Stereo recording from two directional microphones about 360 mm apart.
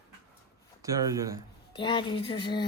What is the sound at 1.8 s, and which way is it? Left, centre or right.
Speech, centre.